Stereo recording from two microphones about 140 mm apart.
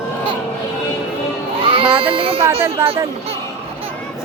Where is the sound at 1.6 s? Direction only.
40° right (ahead or behind).